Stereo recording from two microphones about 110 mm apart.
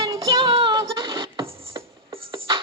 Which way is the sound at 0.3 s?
50° right (ahead or behind).